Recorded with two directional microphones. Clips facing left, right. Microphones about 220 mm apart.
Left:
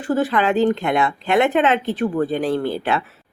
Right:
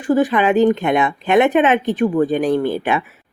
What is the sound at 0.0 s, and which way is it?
A woman's voice, 15° right (ahead or behind).